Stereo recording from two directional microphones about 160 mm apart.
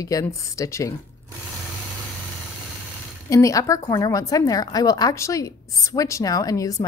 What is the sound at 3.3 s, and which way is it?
A woman's voice, 20° left (ahead or behind).